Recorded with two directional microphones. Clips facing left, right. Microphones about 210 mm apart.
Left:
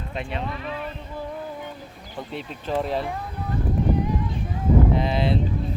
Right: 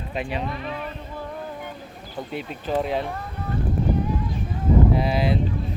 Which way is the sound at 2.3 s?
Centre (ahead or behind).